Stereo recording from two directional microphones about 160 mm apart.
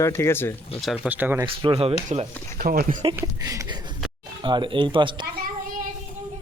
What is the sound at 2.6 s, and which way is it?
Speech, 65° right (ahead or behind).